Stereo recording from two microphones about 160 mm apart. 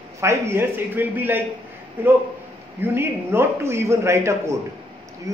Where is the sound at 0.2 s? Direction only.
15° right (ahead or behind).